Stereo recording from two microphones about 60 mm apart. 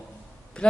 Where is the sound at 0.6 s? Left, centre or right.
Centre.